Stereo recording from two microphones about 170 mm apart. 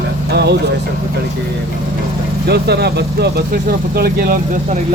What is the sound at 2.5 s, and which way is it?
Speech, 75° right (ahead or behind).